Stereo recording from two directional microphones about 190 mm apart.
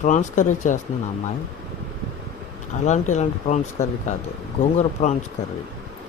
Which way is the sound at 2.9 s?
40° left (ahead or behind).